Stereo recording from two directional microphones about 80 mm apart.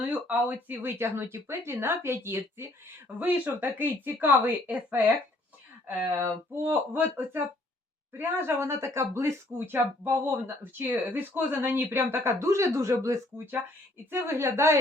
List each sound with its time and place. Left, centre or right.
0.0 s speech: right
6.1 s speech: right
9.5 s speech: right